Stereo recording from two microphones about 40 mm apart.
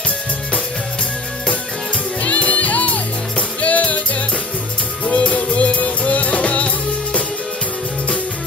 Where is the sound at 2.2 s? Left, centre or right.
Left.